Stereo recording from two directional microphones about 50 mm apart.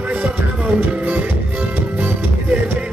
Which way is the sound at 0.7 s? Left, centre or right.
Right.